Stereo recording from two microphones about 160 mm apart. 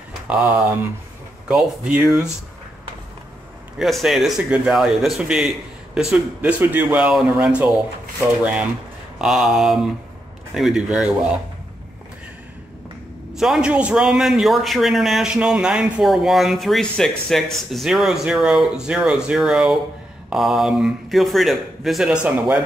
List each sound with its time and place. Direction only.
0.3 s a man's voice: 10° right (ahead or behind)
3.7 s a man's voice: centre (ahead or behind)
9.2 s a man's voice: centre (ahead or behind)
13.3 s a man's voice: 5° right (ahead or behind)